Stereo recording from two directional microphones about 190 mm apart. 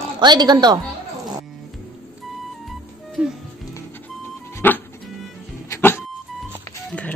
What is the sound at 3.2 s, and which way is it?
Music, 5° right (ahead or behind).